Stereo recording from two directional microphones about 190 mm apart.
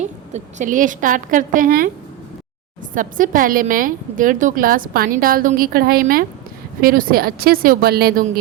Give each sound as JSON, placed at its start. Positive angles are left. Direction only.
{"t": 0.0, "sound": "a woman's voice", "side_deg": -40}
{"t": 2.9, "sound": "a woman's voice", "side_deg": -45}